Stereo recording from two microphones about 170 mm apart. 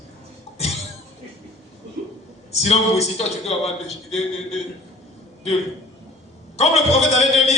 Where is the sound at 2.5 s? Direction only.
40° left (ahead or behind).